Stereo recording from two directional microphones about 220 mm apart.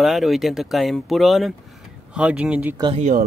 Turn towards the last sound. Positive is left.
turn(degrees=-30)  # may be behind; listen again after turning